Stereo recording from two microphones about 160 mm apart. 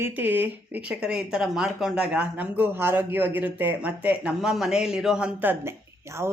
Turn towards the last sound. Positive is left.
turn(degrees=-15)  # may be behind; listen again after turning